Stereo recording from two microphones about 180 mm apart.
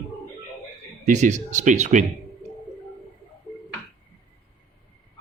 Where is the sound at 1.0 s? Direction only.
45° right (ahead or behind).